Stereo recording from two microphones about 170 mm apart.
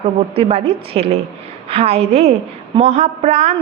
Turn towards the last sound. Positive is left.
turn(degrees=-40)  # may be behind; listen again after turning